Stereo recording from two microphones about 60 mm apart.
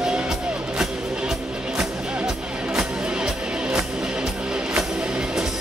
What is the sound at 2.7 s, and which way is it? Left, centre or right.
Music, centre.